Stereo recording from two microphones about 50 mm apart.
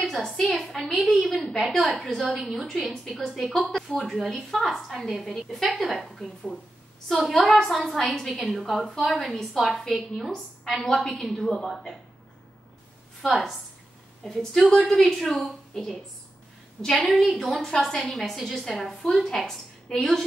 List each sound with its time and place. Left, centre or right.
0.0 s a woman's voice: centre
14.2 s a woman's voice: centre